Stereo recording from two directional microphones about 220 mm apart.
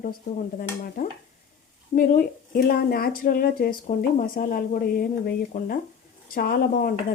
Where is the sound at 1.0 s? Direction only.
35° left (ahead or behind).